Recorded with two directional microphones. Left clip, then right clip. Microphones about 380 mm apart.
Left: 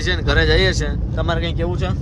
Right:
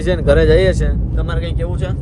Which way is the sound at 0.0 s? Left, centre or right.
Centre.